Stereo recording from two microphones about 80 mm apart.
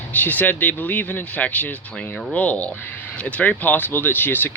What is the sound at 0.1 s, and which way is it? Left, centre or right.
Speech, left.